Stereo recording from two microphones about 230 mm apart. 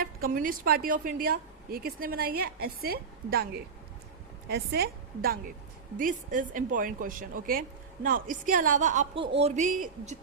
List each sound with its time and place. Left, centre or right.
0.0 s a woman's voice: right